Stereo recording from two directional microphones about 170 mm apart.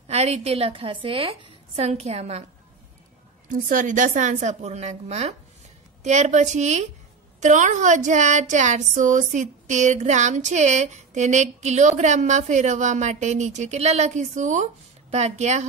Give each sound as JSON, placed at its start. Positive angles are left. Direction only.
{"t": 0.1, "sound": "a woman's voice", "side_deg": -40}
{"t": 3.4, "sound": "speech", "side_deg": -55}